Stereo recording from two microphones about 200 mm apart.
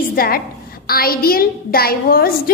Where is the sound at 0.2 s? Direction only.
45° left (ahead or behind).